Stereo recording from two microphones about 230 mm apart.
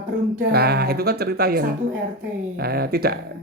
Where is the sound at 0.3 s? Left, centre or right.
Right.